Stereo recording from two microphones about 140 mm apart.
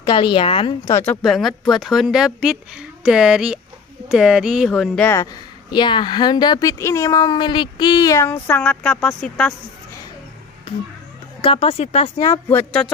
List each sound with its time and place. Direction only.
0.0 s a woman's voice: 35° left (ahead or behind)
0.8 s speech: 20° left (ahead or behind)
1.2 s a woman's voice: centre (ahead or behind)
5.0 s speech: 20° left (ahead or behind)
5.7 s speech: 35° left (ahead or behind); by 9.4 s 5° left (ahead or behind)
11.4 s speech: 45° left (ahead or behind)
12.4 s speech: 15° left (ahead or behind)